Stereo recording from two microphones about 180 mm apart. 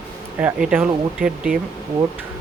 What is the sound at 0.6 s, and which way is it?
Speech, 5° right (ahead or behind).